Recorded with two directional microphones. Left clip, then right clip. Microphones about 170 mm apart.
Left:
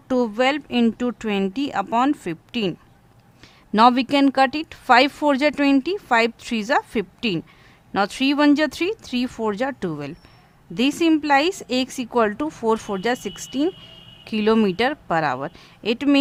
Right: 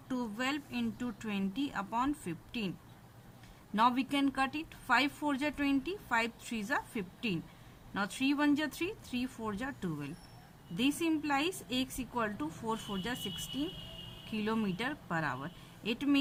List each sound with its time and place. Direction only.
0.1 s speech: 65° left (ahead or behind)
3.8 s speech: 65° left (ahead or behind)